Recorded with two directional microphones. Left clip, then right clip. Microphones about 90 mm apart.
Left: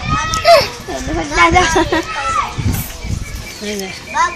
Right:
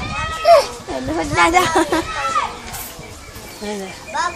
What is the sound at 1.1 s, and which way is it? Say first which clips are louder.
Speech: left 3 dB; 75° right (ahead or behind).